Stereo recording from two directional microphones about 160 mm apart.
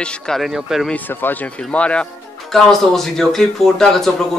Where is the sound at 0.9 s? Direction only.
10° left (ahead or behind).